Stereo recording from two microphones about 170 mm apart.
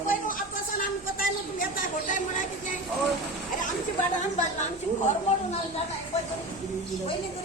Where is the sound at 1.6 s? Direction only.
50° left (ahead or behind).